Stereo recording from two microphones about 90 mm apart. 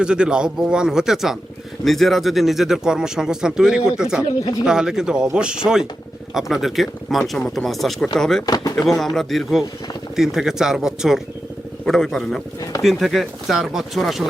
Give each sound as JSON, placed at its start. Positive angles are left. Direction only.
{"t": 0.0, "sound": "speech", "side_deg": -10}
{"t": 8.4, "sound": "speech", "side_deg": 45}
{"t": 9.1, "sound": "speech", "side_deg": 0}